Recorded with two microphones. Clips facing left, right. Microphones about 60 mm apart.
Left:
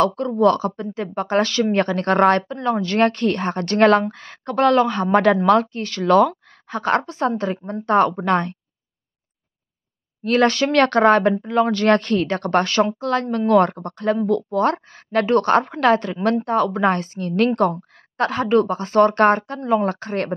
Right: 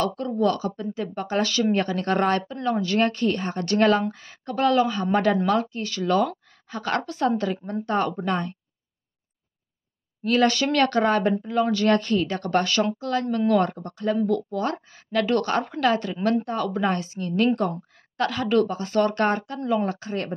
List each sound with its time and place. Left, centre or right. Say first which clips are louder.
0.0 s speech: left 6 dB; left
10.2 s speech: left 3 dB; left
17.6 s speech: left 7 dB; left
18.1 s speech: left 4 dB; left